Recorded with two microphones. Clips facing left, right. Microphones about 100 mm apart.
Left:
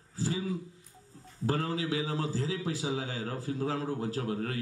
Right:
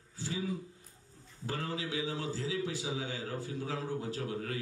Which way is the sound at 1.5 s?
35° left (ahead or behind).